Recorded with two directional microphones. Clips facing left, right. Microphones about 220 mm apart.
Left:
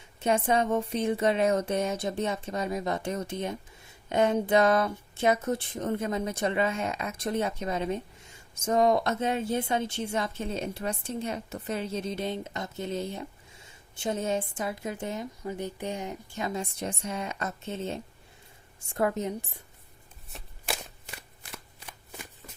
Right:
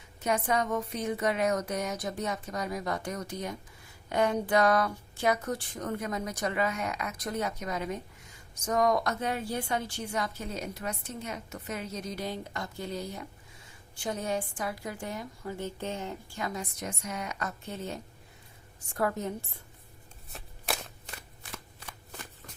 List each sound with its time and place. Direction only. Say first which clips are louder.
0.2 s a woman's voice: left 4 dB; 25° left (ahead or behind)
20.3 s shuffling cards: even; centre (ahead or behind)